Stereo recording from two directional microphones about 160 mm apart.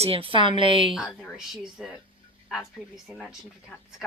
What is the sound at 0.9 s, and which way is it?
Speech, centre (ahead or behind).